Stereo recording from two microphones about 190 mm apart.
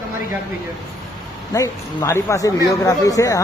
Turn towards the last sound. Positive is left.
turn(degrees=20)  # may be behind; listen again after turning